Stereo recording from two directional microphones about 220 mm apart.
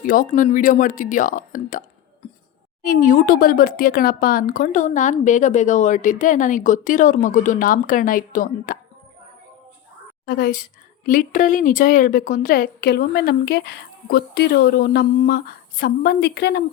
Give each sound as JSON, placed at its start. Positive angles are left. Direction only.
{"t": 0.0, "sound": "speech", "side_deg": 40}
{"t": 2.8, "sound": "speech", "side_deg": 40}
{"t": 10.2, "sound": "a woman's voice", "side_deg": 40}